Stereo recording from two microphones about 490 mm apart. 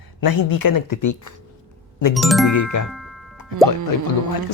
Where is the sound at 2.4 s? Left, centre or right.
Left.